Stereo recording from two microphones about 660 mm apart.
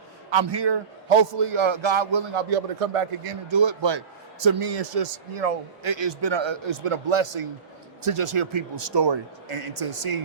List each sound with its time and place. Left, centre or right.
0.3 s a man's voice: right
1.0 s a man's voice: right
4.7 s speech: right
5.8 s a man's voice: right